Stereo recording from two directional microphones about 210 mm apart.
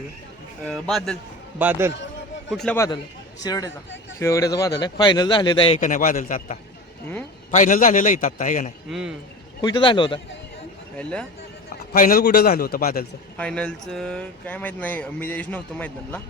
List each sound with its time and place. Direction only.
0.7 s speech: centre (ahead or behind)
1.5 s a man's voice: 10° right (ahead or behind)
2.5 s speech: centre (ahead or behind)
2.7 s a man's voice: 15° left (ahead or behind); by 8.7 s 40° left (ahead or behind)
8.9 s speech: centre (ahead or behind)
9.6 s a man's voice: 20° left (ahead or behind)
10.9 s speech: 5° left (ahead or behind)
11.9 s a man's voice: 40° left (ahead or behind)
13.3 s speech: 5° left (ahead or behind)